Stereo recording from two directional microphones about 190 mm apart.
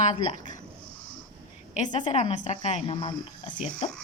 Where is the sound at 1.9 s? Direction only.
30° left (ahead or behind).